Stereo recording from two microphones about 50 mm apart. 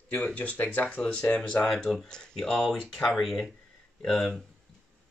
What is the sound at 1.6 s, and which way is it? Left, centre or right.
Speech, centre.